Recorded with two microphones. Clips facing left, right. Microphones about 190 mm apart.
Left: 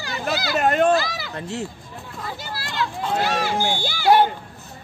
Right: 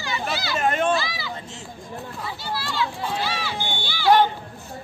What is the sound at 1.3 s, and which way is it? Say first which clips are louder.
Speech: left 8 dB; 65° left (ahead or behind).